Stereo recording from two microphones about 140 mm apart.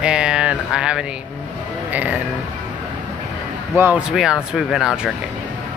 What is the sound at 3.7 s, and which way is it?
Speech, 10° right (ahead or behind).